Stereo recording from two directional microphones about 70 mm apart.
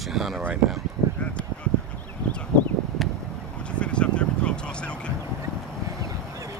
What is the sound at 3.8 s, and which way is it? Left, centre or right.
Vehicle, centre.